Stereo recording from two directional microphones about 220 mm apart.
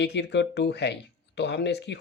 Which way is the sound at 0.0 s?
50° left (ahead or behind).